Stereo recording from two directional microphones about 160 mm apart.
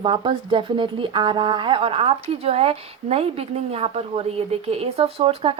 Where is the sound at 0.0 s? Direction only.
30° right (ahead or behind).